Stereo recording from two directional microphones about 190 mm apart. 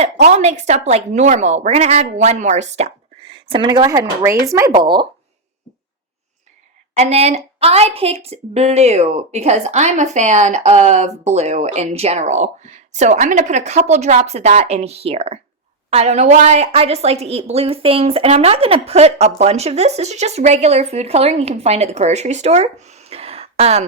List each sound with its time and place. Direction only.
0.3 s a woman's voice: 35° right (ahead or behind)
6.9 s a woman's voice: 35° right (ahead or behind)